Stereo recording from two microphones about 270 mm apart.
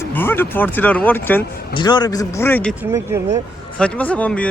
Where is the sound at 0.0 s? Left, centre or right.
Centre.